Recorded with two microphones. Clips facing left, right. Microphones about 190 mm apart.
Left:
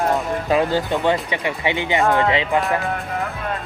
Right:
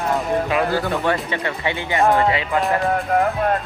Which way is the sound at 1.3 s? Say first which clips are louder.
Left 1 dB; 15° left (ahead or behind).